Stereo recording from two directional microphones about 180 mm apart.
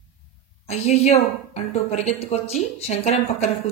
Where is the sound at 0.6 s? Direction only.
35° left (ahead or behind).